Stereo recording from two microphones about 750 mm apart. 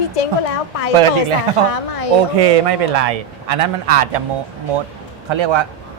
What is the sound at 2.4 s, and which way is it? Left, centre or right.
A man's voice, right.